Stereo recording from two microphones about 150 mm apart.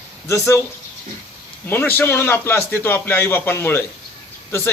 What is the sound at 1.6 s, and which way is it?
A man's voice, 15° left (ahead or behind).